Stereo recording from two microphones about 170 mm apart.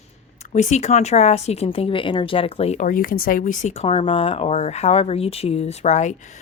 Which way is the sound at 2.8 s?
55° left (ahead or behind).